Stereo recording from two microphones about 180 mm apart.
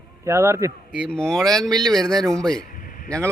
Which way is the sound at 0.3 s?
15° right (ahead or behind).